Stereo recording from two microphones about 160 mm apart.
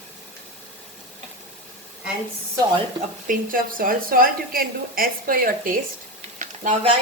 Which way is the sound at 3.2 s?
60° right (ahead or behind).